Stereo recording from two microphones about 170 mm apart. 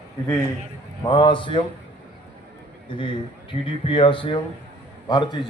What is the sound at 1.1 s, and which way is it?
Speech, 30° left (ahead or behind).